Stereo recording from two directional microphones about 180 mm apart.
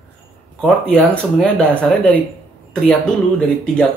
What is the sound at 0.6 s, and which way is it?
Speech, 5° left (ahead or behind).